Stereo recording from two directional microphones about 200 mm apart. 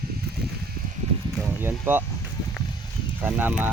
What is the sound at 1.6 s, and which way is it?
Speech, 10° right (ahead or behind).